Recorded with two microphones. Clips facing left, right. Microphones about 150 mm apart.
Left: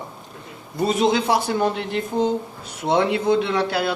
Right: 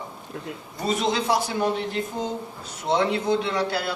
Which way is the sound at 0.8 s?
60° left (ahead or behind).